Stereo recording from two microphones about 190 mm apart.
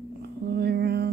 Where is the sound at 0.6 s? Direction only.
60° right (ahead or behind).